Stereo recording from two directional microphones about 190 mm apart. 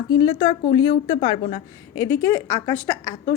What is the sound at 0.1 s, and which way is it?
Speech, 25° left (ahead or behind).